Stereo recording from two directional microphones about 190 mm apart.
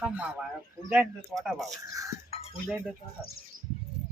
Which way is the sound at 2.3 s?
30° left (ahead or behind).